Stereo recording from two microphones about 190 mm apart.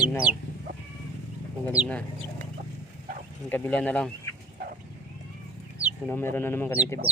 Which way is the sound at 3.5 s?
10° left (ahead or behind).